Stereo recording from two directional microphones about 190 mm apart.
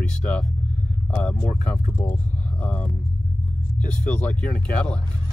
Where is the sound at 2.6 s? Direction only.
10° left (ahead or behind).